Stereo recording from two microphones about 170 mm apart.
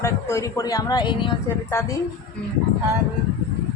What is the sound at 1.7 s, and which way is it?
Speech, 15° left (ahead or behind).